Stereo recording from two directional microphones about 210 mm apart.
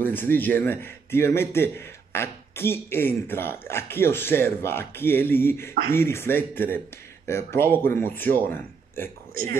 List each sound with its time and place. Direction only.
0.0 s a man's voice: 10° left (ahead or behind)
9.3 s speech: 45° right (ahead or behind)